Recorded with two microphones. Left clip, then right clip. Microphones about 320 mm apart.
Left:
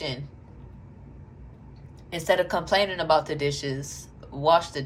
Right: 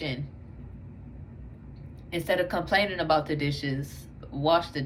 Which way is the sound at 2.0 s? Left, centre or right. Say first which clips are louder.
Left 3 dB; centre.